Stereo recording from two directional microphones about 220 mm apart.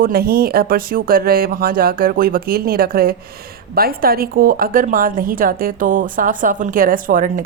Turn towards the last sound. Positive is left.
turn(degrees=-40)  # may be behind; listen again after turning